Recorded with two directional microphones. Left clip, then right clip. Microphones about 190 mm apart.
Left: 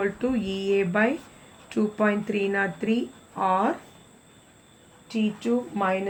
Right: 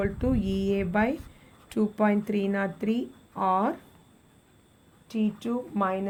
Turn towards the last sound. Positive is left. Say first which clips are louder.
# left 3 dB
turn(degrees=-55)  # may be behind; listen again after turning